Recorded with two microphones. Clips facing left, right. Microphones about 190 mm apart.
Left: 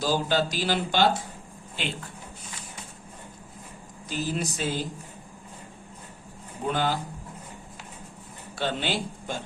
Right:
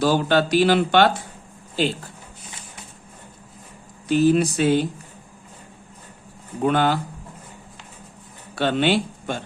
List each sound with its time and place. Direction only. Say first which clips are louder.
0.0 s speech: right 6 dB; 65° right (ahead or behind)
1.7 s speech: right 11 dB; 35° right (ahead or behind)
4.1 s speech: right 13 dB; 65° right (ahead or behind)
6.7 s speech: right 7 dB; 70° right (ahead or behind)
8.5 s speech: right 9 dB; 65° right (ahead or behind)